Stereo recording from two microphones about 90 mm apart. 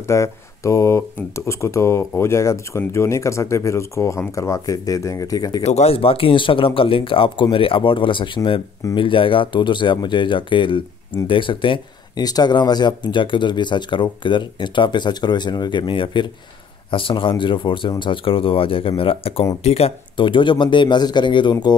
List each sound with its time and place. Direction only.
0.0 s speech: 35° left (ahead or behind)
5.9 s speech: 90° left; by 11.8 s 70° left (ahead or behind)
12.2 s speech: 45° left (ahead or behind); by 19.4 s 90° left
19.7 s speech: 75° left (ahead or behind); by 21.7 s 55° left (ahead or behind)